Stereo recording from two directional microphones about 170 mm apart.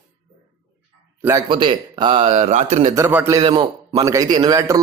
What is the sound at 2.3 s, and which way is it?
Speech, 45° right (ahead or behind).